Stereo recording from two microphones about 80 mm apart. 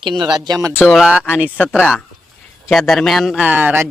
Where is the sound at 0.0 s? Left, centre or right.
Right.